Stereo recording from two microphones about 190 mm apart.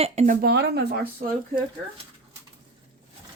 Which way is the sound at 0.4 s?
60° right (ahead or behind).